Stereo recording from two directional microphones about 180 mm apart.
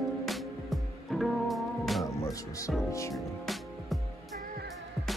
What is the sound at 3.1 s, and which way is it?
Music, centre (ahead or behind).